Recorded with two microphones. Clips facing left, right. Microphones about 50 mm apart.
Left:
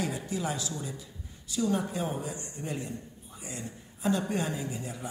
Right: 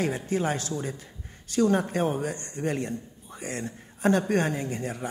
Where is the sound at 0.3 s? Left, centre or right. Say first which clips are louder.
Right 6 dB; right.